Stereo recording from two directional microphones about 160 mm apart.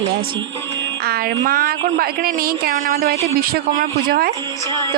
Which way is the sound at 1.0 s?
75° right (ahead or behind).